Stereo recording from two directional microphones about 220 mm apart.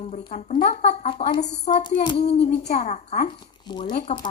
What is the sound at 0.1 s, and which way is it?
Speech, 35° left (ahead or behind).